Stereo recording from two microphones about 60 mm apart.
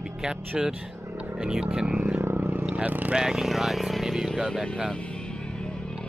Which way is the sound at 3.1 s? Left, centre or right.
Centre.